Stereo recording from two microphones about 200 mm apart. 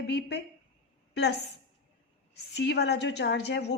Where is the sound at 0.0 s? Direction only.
60° left (ahead or behind).